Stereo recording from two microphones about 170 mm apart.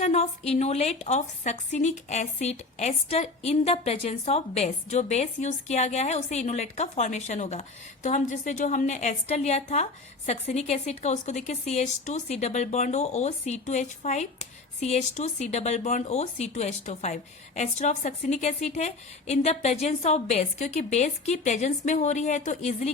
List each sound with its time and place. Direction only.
0.0 s a woman's voice: 40° left (ahead or behind)